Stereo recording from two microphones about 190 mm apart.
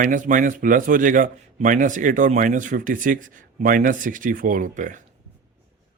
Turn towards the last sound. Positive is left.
turn(degrees=-40)  # may be behind; listen again after turning